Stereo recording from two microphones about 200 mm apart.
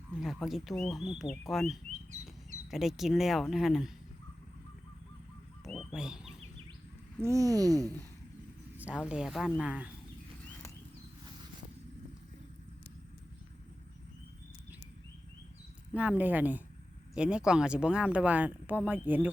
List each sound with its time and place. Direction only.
0.2 s speech: centre (ahead or behind)
5.6 s speech: centre (ahead or behind)
7.2 s speech: 15° right (ahead or behind)
9.0 s speech: 5° right (ahead or behind)
16.0 s speech: 10° right (ahead or behind)